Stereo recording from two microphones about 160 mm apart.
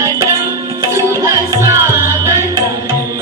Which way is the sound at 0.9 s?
20° right (ahead or behind).